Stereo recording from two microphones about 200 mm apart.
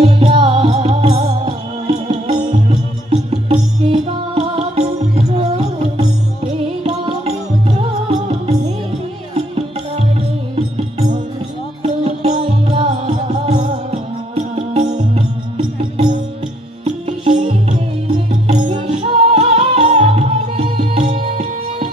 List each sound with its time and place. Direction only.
0.2 s music: 25° right (ahead or behind)
10.5 s music: 30° right (ahead or behind)